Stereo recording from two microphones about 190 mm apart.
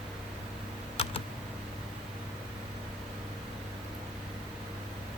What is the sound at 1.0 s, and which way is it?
Computer keyboard, 30° left (ahead or behind).